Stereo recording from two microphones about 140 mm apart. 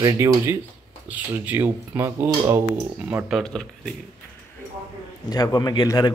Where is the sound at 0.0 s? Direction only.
20° right (ahead or behind).